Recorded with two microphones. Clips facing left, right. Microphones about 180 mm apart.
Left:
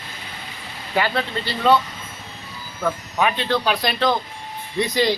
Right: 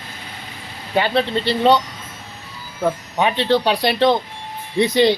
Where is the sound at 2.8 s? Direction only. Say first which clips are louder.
Right 2 dB; 25° right (ahead or behind).